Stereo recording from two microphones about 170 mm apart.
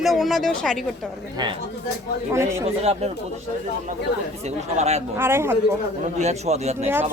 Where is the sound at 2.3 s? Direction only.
15° right (ahead or behind).